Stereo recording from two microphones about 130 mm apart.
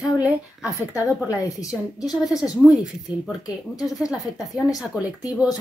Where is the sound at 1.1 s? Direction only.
Centre (ahead or behind).